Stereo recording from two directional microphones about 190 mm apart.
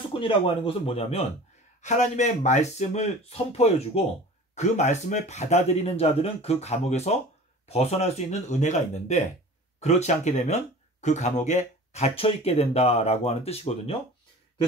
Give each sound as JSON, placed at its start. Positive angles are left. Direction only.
{"t": 0.2, "sound": "speech", "side_deg": 30}